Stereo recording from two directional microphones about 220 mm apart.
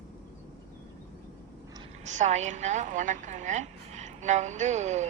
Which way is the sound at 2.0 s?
30° right (ahead or behind).